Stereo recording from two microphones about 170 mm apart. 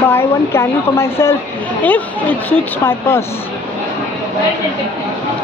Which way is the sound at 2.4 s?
15° left (ahead or behind).